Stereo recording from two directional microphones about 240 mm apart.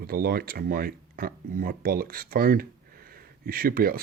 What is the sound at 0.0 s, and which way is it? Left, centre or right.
Speech, right.